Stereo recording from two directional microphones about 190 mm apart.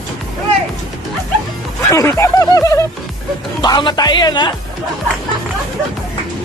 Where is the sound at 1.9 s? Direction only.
15° left (ahead or behind).